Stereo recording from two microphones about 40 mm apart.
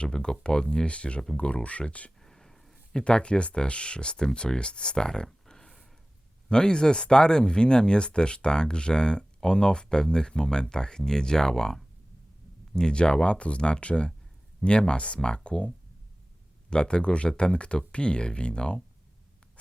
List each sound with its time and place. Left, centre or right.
0.0 s speech: left
0.9 s speech: left
2.2 s a sound: centre
2.9 s speech: left